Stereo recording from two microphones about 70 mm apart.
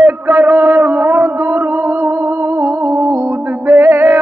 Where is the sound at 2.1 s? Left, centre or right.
Right.